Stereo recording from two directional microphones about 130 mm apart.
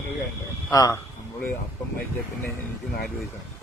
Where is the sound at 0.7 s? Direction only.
30° left (ahead or behind).